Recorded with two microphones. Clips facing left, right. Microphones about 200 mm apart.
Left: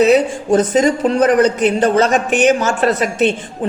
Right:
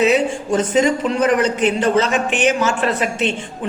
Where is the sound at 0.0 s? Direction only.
40° left (ahead or behind).